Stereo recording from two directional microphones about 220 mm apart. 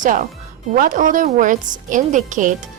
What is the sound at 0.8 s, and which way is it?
A woman's voice, 35° right (ahead or behind).